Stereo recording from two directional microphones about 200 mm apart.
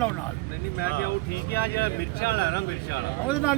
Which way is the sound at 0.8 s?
55° left (ahead or behind).